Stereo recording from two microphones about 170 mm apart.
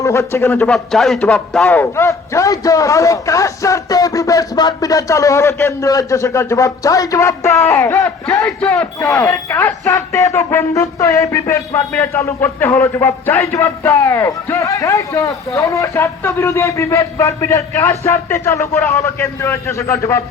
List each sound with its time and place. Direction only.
0.0 s speech: 15° left (ahead or behind)
0.7 s speech: centre (ahead or behind)
1.6 s a man's voice: 15° left (ahead or behind)